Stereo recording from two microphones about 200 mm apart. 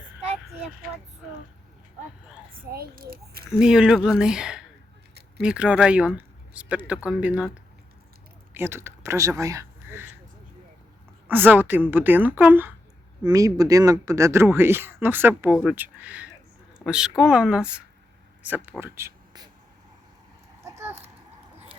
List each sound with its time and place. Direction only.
2.7 s a child's voice: 45° right (ahead or behind)
3.6 s speech: 5° right (ahead or behind)
8.5 s speech: 10° right (ahead or behind)
11.3 s speech: 10° right (ahead or behind)
18.8 s a sound: 15° right (ahead or behind)
20.7 s a sound: 10° right (ahead or behind)